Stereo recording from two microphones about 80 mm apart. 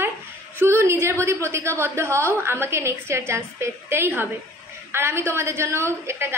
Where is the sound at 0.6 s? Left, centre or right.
Right.